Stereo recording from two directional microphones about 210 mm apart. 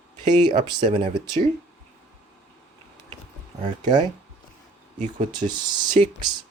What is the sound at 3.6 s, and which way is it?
Speech, 25° right (ahead or behind).